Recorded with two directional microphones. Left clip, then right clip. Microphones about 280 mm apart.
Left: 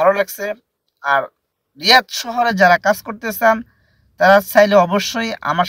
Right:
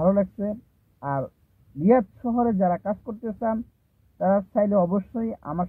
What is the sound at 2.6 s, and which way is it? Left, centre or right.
Speech, left.